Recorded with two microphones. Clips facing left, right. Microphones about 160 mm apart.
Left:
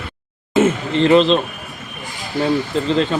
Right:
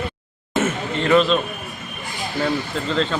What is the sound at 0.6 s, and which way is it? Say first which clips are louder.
Chatter: left 7 dB; 25° left (ahead or behind).